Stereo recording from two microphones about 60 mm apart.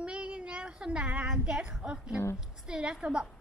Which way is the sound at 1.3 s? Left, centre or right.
Centre.